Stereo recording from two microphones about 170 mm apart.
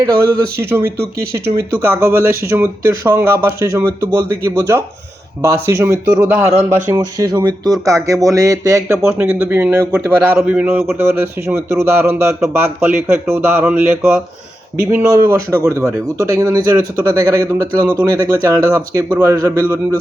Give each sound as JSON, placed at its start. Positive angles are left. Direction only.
{"t": 0.0, "sound": "a man's voice", "side_deg": -20}
{"t": 6.9, "sound": "a man's voice", "side_deg": -25}